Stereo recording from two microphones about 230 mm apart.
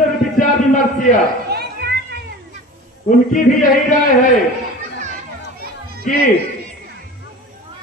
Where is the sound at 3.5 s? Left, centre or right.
Left.